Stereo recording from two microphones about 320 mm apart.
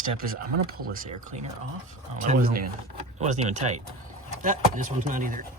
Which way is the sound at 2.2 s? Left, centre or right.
Right.